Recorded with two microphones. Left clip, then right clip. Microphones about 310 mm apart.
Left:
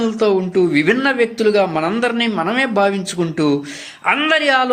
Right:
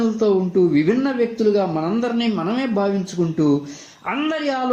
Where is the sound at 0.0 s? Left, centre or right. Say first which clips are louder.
Left 2 dB; left.